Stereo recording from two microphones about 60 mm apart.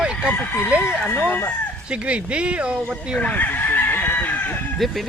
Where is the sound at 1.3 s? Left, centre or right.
Left.